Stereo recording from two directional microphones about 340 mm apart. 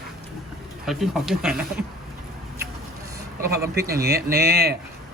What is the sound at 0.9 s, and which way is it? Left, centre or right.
Speech, centre.